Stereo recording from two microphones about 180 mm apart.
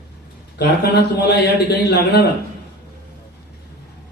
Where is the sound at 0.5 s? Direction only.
65° left (ahead or behind).